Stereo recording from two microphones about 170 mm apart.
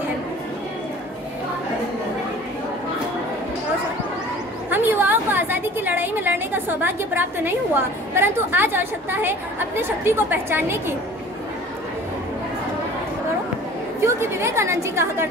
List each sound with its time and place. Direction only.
4.6 s a woman's voice: 10° right (ahead or behind)
14.0 s a woman's voice: 15° right (ahead or behind)